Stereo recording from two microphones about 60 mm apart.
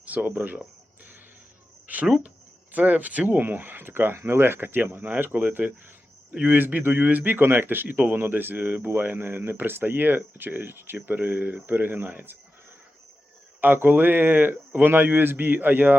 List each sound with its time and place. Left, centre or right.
0.0 s speech: right
1.9 s a sound: right
2.7 s a man's voice: right
13.6 s a man's voice: right